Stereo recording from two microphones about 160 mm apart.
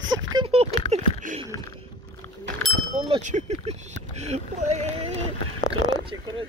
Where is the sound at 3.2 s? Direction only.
50° right (ahead or behind).